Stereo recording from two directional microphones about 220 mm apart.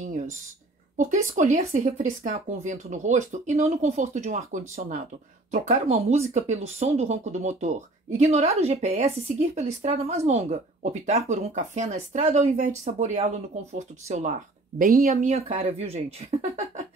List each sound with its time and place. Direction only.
0.9 s speech: 35° right (ahead or behind)